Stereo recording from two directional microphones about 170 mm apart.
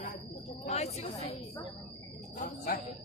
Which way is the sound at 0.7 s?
40° left (ahead or behind).